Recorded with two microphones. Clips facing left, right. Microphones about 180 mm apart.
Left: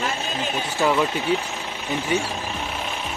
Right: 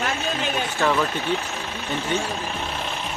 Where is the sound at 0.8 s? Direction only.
15° left (ahead or behind).